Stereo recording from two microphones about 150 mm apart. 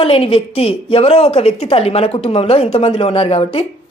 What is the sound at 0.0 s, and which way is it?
A woman's voice, 40° left (ahead or behind).